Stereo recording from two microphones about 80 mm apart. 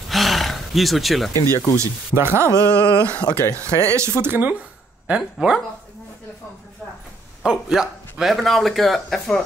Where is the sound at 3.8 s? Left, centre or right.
Right.